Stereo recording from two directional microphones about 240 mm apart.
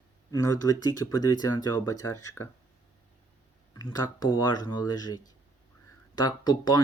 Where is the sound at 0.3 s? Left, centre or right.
Centre.